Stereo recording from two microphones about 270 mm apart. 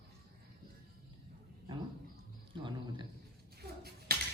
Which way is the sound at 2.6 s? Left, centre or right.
Centre.